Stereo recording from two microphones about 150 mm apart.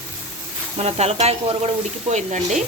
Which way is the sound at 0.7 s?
45° right (ahead or behind).